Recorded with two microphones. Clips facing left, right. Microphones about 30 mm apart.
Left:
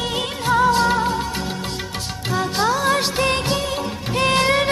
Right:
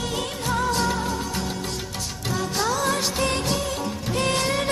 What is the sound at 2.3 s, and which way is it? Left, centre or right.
Music of bollywood, left.